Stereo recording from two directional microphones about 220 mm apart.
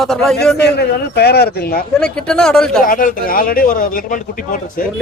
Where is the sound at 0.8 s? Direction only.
45° left (ahead or behind).